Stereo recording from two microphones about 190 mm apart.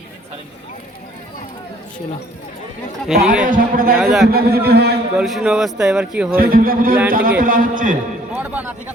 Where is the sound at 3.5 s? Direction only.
45° right (ahead or behind).